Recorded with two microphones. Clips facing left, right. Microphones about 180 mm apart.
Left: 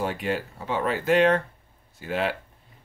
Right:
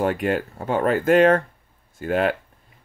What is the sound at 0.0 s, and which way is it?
Speech, 55° right (ahead or behind).